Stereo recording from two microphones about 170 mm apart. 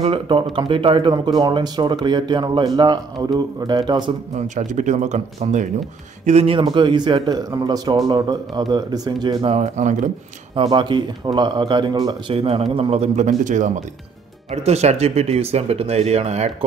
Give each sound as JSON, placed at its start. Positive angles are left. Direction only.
{"t": 0.0, "sound": "speech", "side_deg": -30}
{"t": 4.6, "sound": "a man's voice", "side_deg": -45}
{"t": 10.5, "sound": "speech", "side_deg": -30}
{"t": 12.4, "sound": "a man's voice", "side_deg": -35}